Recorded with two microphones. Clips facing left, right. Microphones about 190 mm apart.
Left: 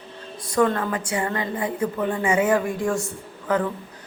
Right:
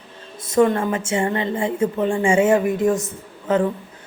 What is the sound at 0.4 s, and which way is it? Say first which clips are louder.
A woman's voice: right 4 dB; 25° right (ahead or behind).